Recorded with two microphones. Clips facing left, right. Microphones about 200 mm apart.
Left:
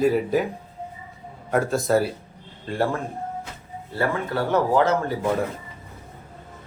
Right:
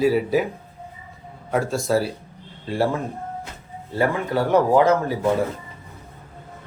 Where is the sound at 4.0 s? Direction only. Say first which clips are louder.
Right 3 dB; 15° right (ahead or behind).